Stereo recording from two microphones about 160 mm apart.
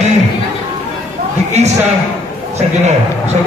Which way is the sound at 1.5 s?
45° right (ahead or behind).